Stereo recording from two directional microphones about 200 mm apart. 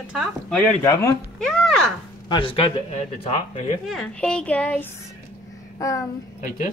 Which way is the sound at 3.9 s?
5° left (ahead or behind).